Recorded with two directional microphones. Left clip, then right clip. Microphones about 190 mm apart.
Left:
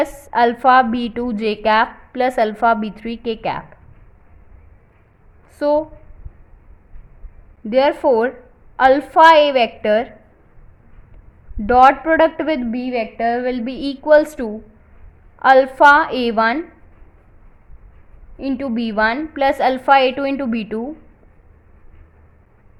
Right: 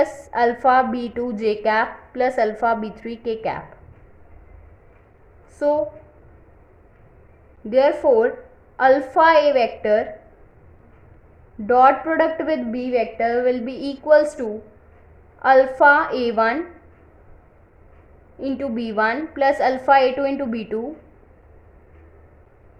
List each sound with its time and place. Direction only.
0.3 s a woman's voice: 30° left (ahead or behind)
5.5 s a woman's voice: 25° left (ahead or behind)
7.7 s a woman's voice: 30° left (ahead or behind)
11.6 s a woman's voice: 30° left (ahead or behind)
12.7 s a woman's voice: 15° left (ahead or behind)
18.3 s a woman's voice: 20° left (ahead or behind)